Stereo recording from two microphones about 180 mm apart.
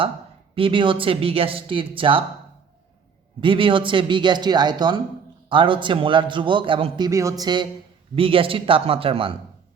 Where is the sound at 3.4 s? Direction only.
30° right (ahead or behind).